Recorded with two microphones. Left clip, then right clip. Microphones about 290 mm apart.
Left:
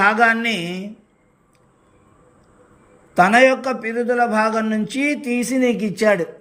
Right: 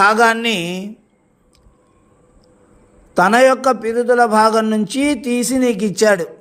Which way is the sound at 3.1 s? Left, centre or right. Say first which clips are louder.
Right 2 dB; centre.